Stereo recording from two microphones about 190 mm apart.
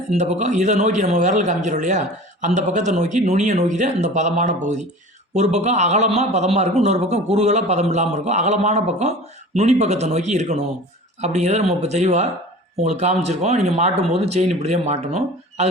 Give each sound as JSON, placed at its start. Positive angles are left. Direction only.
{"t": 0.1, "sound": "speech", "side_deg": -35}